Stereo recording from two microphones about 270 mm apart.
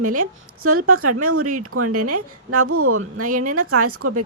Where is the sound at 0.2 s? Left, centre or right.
Right.